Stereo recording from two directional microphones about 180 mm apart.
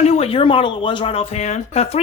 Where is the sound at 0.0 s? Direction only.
35° left (ahead or behind).